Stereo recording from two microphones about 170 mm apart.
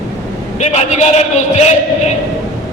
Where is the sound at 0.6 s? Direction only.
45° left (ahead or behind).